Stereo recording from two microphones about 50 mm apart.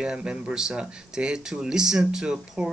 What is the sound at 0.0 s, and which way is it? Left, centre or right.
Speech, centre.